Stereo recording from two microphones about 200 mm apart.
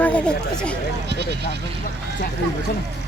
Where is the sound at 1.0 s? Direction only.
55° right (ahead or behind).